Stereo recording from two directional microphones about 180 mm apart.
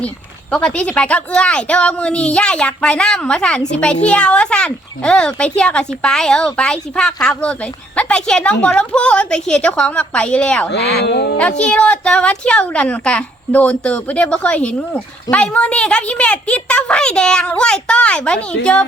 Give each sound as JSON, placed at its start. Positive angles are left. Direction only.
{"t": 0.5, "sound": "speech", "side_deg": 5}
{"t": 10.7, "sound": "speech", "side_deg": 65}
{"t": 11.6, "sound": "speech", "side_deg": 5}